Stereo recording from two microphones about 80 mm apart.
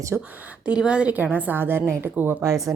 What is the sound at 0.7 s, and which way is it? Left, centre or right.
Speech, centre.